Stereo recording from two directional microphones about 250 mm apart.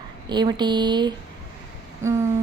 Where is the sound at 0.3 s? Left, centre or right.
Centre.